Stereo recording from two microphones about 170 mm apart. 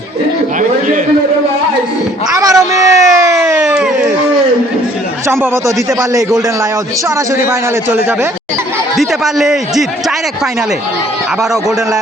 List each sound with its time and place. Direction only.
2.3 s a sound: 20° right (ahead or behind)
5.3 s a man's voice: 15° right (ahead or behind)
9.0 s a man's voice: centre (ahead or behind)